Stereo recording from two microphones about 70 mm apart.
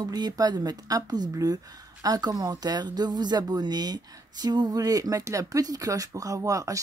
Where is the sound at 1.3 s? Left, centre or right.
Right.